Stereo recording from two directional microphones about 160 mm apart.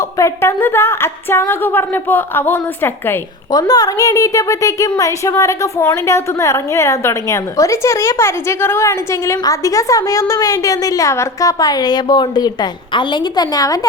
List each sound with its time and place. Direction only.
0.2 s speech: 15° left (ahead or behind)